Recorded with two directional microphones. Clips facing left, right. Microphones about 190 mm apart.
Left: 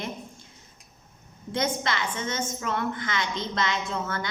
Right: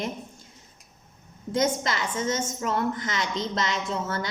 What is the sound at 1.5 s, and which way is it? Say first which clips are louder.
A woman's voice: right 3 dB; 40° right (ahead or behind).